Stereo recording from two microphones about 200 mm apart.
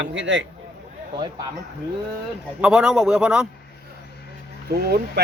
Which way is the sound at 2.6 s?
5° right (ahead or behind).